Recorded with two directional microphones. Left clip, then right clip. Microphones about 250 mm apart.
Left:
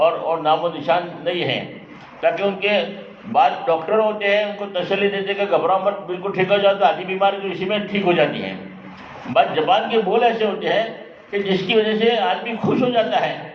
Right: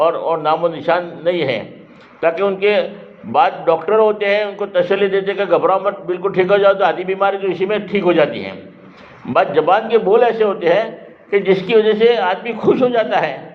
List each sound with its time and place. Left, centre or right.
0.0 s a man's voice: right